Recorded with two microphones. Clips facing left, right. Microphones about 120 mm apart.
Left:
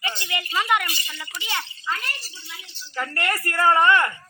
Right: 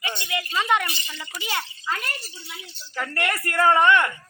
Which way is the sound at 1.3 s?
40° right (ahead or behind).